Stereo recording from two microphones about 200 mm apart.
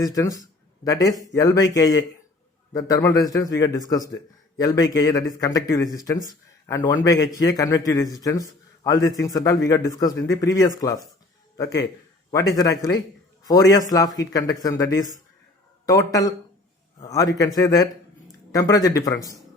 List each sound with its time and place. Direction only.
0.0 s a man's voice: 20° left (ahead or behind)